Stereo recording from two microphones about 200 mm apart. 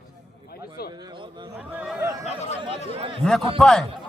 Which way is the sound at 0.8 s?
50° left (ahead or behind).